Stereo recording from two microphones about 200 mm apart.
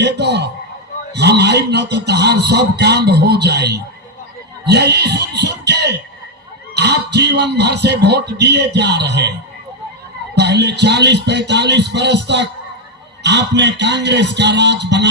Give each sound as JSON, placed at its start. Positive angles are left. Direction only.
{"t": 0.0, "sound": "a sound", "side_deg": -55}
{"t": 1.1, "sound": "speech", "side_deg": -55}
{"t": 10.3, "sound": "speech", "side_deg": -55}